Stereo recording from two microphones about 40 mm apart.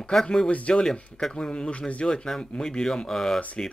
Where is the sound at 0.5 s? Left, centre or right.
Left.